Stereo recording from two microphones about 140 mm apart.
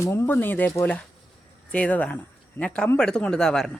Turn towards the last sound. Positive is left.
turn(degrees=5)  # may be behind; listen again after turning